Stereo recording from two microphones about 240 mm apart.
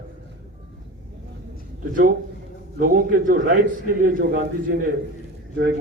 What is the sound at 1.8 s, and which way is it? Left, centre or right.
A man's voice, right.